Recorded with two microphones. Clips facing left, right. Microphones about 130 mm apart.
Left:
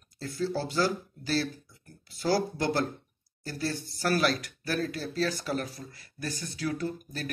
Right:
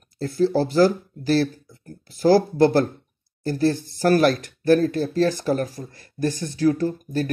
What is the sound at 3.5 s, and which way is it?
Speech, 45° right (ahead or behind).